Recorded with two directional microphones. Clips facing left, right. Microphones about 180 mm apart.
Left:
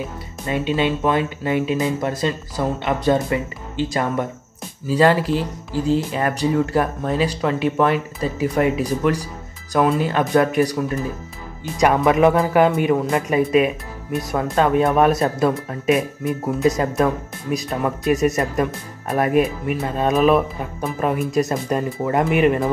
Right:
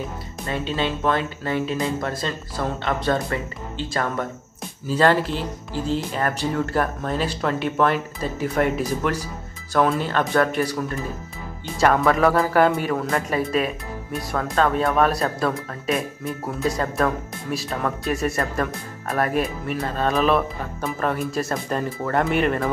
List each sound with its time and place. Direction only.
0.5 s speech: 10° left (ahead or behind)
11.7 s speech: 15° left (ahead or behind)
15.9 s speech: centre (ahead or behind)
16.6 s speech: 20° left (ahead or behind)
17.5 s speech: 10° left (ahead or behind)
18.1 s speech: 20° left (ahead or behind)
19.3 s speech: 5° left (ahead or behind)
21.3 s speech: 20° left (ahead or behind)